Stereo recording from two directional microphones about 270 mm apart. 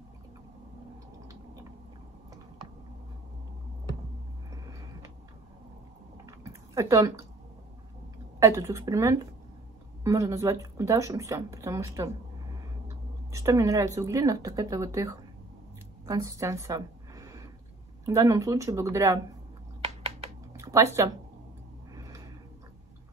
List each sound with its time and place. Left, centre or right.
6.7 s speech: centre
8.4 s speech: centre
16.1 s a sound: centre
18.0 s speech: centre
20.5 s speech: centre
21.9 s a sound: centre